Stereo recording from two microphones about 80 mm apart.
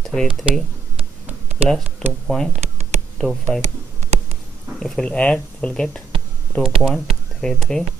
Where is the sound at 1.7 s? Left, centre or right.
Centre.